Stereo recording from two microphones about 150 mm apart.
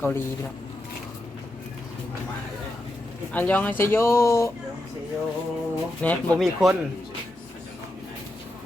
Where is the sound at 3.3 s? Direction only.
10° left (ahead or behind).